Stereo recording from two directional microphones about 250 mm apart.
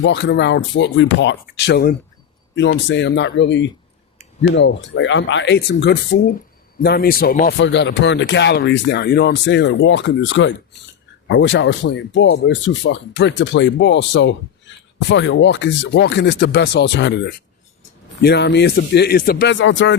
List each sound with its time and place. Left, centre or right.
0.0 s speech: left